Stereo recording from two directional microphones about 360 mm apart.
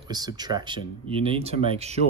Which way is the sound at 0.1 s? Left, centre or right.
Centre.